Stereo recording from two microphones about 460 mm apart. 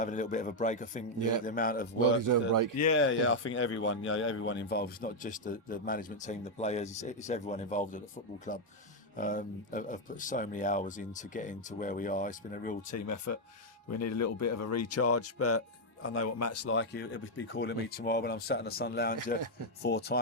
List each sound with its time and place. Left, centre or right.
0.0 s speech: centre
1.2 s a man's voice: right
1.5 s speech: centre
2.2 s a man's voice: right
2.8 s speech: left
12.9 s speech: left